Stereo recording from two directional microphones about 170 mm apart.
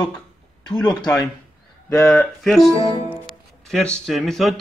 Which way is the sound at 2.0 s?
Centre (ahead or behind).